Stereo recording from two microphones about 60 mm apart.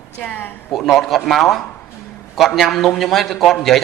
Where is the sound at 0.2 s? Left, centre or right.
Left.